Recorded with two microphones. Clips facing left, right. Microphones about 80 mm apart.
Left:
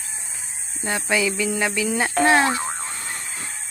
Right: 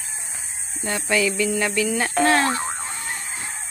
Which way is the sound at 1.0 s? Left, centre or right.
Centre.